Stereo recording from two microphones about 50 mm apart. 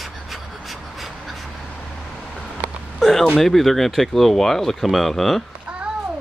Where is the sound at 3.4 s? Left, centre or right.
Centre.